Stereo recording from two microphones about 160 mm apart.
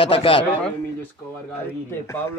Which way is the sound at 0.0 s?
35° left (ahead or behind).